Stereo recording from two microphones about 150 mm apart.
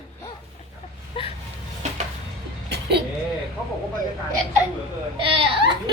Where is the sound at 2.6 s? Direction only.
90° right.